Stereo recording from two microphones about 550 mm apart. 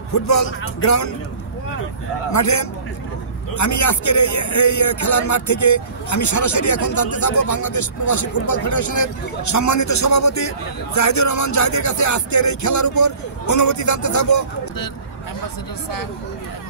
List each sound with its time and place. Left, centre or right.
0.1 s speech: left
2.3 s a man's voice: left